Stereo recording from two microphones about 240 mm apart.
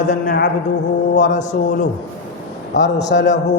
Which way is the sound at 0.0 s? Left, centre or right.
Left.